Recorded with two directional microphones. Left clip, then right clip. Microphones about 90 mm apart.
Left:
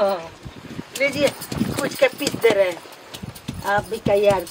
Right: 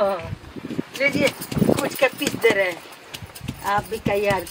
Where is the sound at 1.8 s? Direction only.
Centre (ahead or behind).